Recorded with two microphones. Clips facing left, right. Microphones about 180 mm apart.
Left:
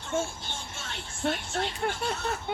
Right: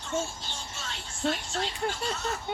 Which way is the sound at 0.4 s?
55° left (ahead or behind).